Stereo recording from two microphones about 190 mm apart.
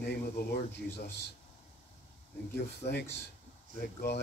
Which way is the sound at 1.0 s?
60° left (ahead or behind).